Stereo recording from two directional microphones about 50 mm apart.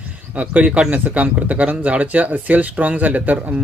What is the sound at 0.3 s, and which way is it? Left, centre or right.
Speech, right.